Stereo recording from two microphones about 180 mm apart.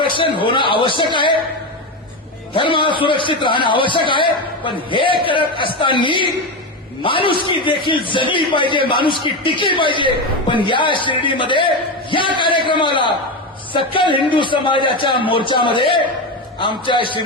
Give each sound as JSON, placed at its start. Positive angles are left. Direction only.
{"t": 0.0, "sound": "speech", "side_deg": 30}
{"t": 2.5, "sound": "speech", "side_deg": 30}